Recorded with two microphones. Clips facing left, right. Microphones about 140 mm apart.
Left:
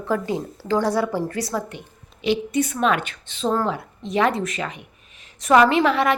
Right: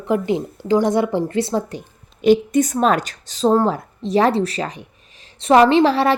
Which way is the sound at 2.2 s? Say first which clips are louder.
Right 7 dB; 45° right (ahead or behind).